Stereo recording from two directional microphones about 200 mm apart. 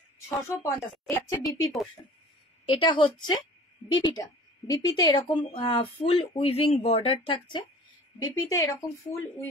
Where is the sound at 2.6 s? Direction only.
25° left (ahead or behind).